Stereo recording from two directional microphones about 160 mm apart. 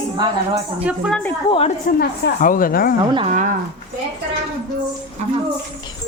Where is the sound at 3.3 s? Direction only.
50° right (ahead or behind).